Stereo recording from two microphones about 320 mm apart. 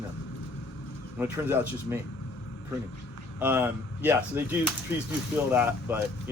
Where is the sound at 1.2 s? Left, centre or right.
Centre.